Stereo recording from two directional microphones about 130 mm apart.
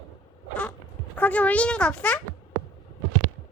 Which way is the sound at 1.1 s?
10° left (ahead or behind).